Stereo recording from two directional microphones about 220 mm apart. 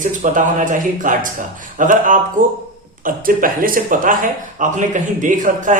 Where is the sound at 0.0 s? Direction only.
35° right (ahead or behind).